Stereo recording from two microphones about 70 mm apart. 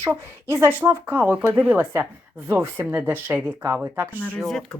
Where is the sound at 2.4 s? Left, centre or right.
Right.